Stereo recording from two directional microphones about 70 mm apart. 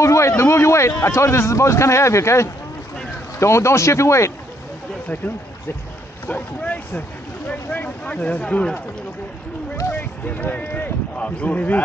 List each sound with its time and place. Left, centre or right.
0.0 s a sound: left
0.4 s speech: left
6.2 s speech: left
9.8 s speech: left